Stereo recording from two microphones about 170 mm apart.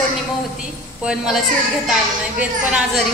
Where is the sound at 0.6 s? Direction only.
5° right (ahead or behind).